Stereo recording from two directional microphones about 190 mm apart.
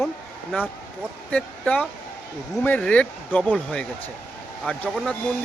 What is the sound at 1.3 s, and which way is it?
Speech, 5° left (ahead or behind).